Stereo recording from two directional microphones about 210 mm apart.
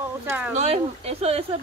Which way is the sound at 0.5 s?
30° right (ahead or behind).